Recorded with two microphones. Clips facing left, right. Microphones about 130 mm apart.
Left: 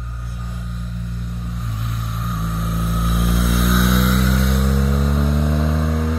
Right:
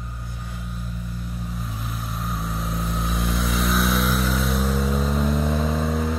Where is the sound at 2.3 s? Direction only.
Centre (ahead or behind).